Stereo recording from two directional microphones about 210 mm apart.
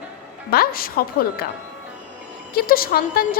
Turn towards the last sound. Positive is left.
turn(degrees=45)  # may be behind; listen again after turning